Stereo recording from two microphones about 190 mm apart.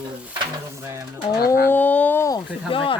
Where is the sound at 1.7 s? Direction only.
10° left (ahead or behind).